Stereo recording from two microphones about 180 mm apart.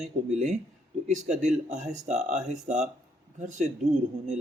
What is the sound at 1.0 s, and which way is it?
A man's voice, 40° right (ahead or behind).